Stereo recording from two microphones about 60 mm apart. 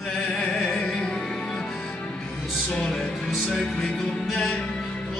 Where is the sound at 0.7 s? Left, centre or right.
Centre.